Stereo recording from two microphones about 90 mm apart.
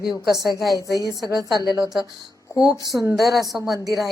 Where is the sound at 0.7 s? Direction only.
45° left (ahead or behind).